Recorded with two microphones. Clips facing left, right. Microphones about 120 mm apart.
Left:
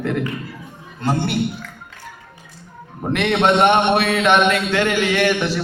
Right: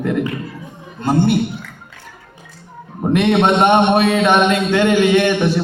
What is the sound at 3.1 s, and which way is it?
Speech, 20° right (ahead or behind).